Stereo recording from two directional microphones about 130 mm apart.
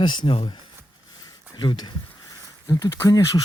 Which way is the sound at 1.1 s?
30° left (ahead or behind).